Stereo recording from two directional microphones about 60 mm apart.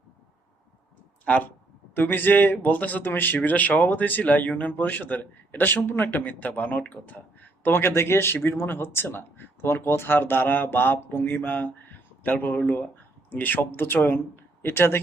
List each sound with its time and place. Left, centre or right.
1.2 s speech: left
2.0 s speech: left
7.6 s speech: left